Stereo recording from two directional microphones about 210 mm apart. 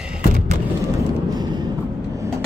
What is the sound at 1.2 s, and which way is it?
Vehicle, 20° right (ahead or behind).